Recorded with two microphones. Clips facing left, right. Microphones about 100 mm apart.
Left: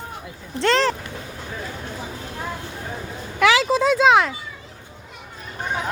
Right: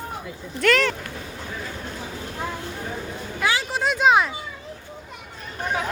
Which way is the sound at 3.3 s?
90° left.